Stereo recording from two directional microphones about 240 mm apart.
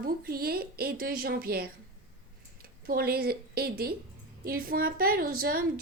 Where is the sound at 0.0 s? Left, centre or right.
Right.